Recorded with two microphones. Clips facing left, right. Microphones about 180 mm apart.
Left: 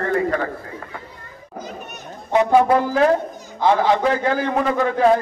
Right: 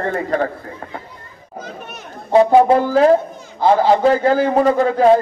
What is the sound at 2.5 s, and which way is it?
A man's voice, 30° right (ahead or behind).